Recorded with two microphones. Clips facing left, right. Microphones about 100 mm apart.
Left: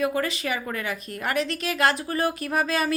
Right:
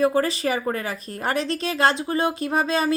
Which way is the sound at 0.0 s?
35° right (ahead or behind).